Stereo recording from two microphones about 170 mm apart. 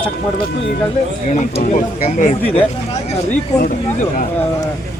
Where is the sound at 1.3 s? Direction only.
45° left (ahead or behind).